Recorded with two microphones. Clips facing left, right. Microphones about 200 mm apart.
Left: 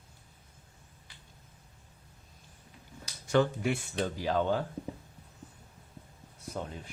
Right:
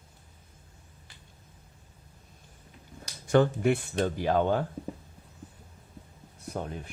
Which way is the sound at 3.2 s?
50° right (ahead or behind).